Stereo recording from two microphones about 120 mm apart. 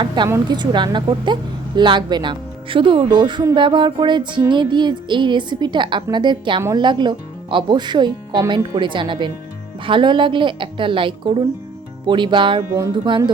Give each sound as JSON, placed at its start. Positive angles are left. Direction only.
{"t": 0.2, "sound": "music", "side_deg": -40}
{"t": 9.8, "sound": "a woman's voice", "side_deg": -40}
{"t": 12.0, "sound": "music", "side_deg": -40}